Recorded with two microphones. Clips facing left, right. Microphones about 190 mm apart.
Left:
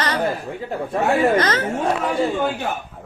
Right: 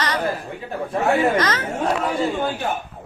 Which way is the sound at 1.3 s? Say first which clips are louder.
Left 2 dB; 30° left (ahead or behind).